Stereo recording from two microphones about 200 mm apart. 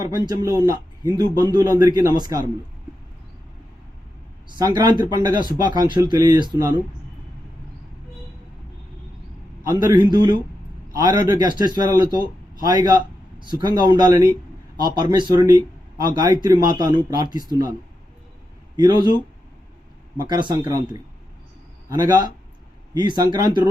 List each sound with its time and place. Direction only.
0.3 s speech: 20° right (ahead or behind)
4.5 s speech: 20° right (ahead or behind)
9.6 s a man's voice: 20° right (ahead or behind)
18.8 s speech: 20° right (ahead or behind)
20.1 s speech: 20° right (ahead or behind)
23.0 s speech: 20° right (ahead or behind)